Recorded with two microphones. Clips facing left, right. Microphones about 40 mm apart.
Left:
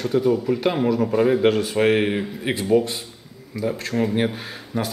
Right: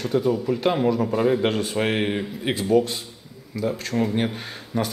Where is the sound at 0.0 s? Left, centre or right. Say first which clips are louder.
Left 2 dB; centre.